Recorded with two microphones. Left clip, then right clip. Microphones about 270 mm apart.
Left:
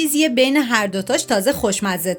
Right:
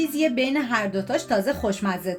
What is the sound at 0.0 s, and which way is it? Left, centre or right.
A woman's voice, left.